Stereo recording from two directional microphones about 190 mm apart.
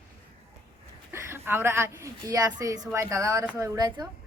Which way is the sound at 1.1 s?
10° right (ahead or behind).